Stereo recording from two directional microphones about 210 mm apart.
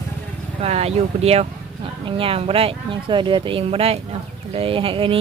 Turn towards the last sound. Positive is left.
turn(degrees=-25)  # may be behind; listen again after turning